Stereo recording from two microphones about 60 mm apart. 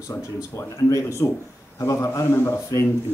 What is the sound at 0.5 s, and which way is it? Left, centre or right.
Speech, left.